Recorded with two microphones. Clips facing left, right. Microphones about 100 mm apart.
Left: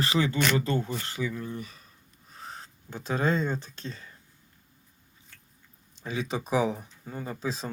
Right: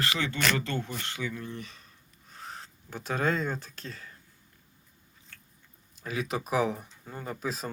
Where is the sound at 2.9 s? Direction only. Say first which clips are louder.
Left 2 dB; centre (ahead or behind).